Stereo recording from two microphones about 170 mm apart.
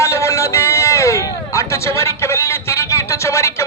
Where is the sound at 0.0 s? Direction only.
15° left (ahead or behind).